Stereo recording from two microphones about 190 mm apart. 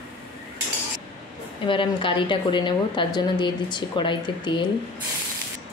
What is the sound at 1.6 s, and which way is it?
Speech, 25° left (ahead or behind).